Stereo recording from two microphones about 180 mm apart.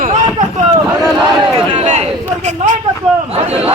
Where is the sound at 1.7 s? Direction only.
40° right (ahead or behind).